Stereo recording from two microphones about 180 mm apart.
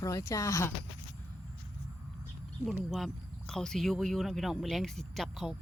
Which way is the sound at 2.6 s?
Centre (ahead or behind).